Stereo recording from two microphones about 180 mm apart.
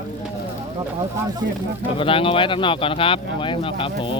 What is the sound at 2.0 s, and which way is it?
Speech, 30° left (ahead or behind).